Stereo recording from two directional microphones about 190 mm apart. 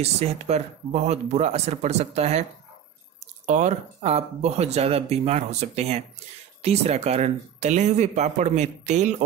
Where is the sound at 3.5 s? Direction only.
40° right (ahead or behind).